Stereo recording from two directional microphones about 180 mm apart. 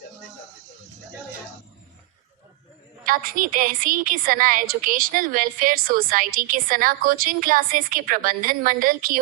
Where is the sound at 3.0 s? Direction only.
50° right (ahead or behind).